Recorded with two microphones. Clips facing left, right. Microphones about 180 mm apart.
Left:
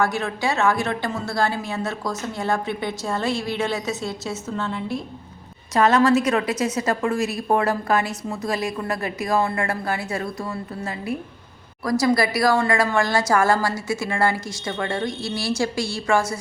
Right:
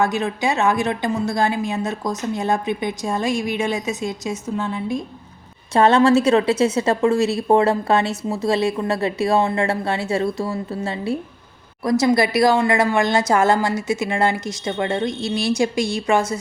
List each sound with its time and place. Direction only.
0.0 s a woman's voice: 20° right (ahead or behind)
5.7 s a woman's voice: 30° right (ahead or behind)